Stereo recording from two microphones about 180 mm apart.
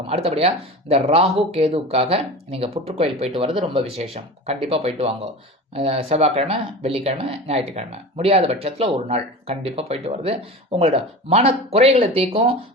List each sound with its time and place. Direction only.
0.1 s speech: 35° right (ahead or behind)